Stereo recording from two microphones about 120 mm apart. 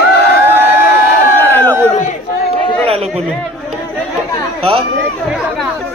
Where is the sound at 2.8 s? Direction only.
55° right (ahead or behind).